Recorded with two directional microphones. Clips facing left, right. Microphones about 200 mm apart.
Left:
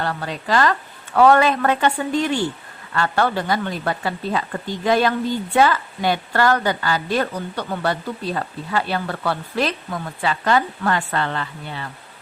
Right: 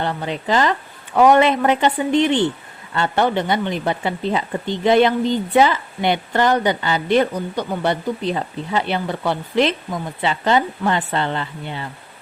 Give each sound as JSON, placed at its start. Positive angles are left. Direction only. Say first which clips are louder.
{"t": 0.0, "sound": "speech", "louder": "right 2 dB", "side_deg": -20}